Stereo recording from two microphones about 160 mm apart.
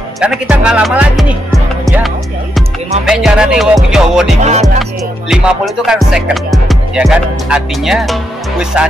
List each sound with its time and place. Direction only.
0.2 s music: 5° right (ahead or behind)
4.4 s music: 45° right (ahead or behind)
5.3 s music: 5° right (ahead or behind)